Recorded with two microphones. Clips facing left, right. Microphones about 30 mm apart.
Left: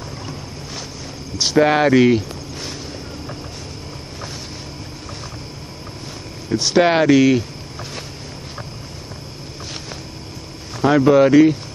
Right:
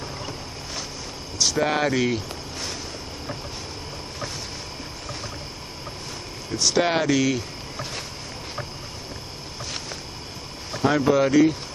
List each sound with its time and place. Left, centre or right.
1.4 s speech: left
6.5 s speech: centre
10.8 s speech: centre